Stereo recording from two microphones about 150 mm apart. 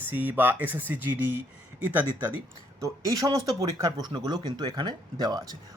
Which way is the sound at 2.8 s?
20° right (ahead or behind).